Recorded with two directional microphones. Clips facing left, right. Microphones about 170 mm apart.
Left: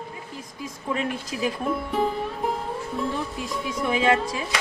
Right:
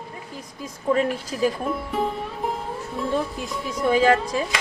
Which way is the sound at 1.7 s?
Centre (ahead or behind).